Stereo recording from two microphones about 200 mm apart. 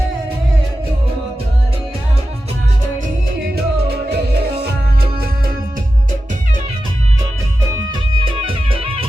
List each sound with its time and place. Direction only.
3.4 s music: 50° right (ahead or behind)
8.1 s music: 25° right (ahead or behind)